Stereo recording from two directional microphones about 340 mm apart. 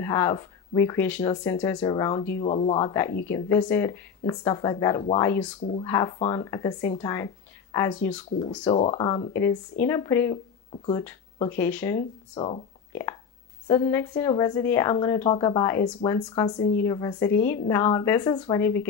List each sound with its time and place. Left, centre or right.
0.0 s speech: centre